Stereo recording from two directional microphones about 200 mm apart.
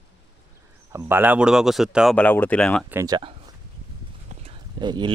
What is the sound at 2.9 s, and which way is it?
Speech, 15° right (ahead or behind).